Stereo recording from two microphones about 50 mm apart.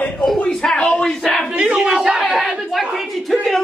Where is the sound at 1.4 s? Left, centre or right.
Centre.